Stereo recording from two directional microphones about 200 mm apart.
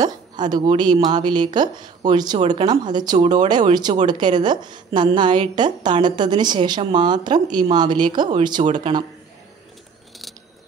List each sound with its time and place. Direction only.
0.0 s a woman's voice: 20° right (ahead or behind)
3.2 s speech: 35° right (ahead or behind)
3.4 s a woman's voice: 20° right (ahead or behind)
8.6 s speech: 35° right (ahead or behind)